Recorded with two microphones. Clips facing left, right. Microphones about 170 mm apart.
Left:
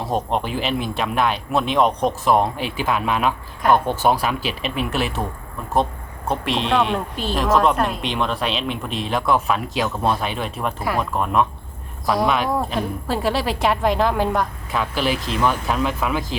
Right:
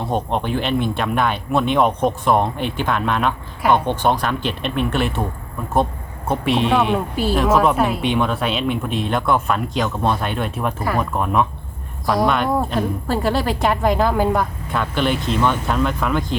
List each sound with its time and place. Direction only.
0.0 s speech: centre (ahead or behind)
6.2 s speech: centre (ahead or behind)